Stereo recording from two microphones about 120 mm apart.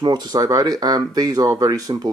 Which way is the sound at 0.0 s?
35° right (ahead or behind).